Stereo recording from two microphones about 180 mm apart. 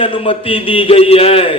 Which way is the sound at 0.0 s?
30° left (ahead or behind).